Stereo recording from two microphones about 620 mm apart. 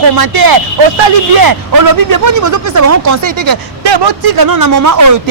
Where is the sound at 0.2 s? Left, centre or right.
Right.